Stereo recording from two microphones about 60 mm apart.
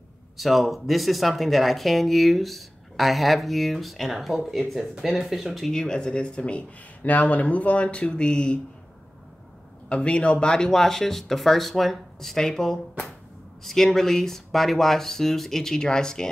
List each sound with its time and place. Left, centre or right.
0.4 s speech: centre
5.7 s speech: centre
9.8 s speech: centre